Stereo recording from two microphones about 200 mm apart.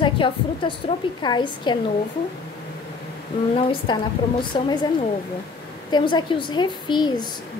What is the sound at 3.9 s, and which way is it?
Speech, 20° left (ahead or behind).